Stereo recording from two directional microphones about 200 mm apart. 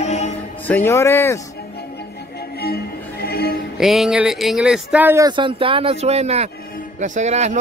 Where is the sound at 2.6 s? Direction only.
50° left (ahead or behind).